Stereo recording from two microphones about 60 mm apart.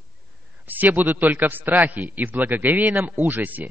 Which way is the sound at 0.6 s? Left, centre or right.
Right.